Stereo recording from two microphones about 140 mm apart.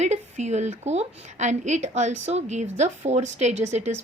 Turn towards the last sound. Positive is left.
turn(degrees=-55)  # may be behind; listen again after turning